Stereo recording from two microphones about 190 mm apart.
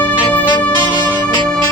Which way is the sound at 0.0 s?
10° left (ahead or behind).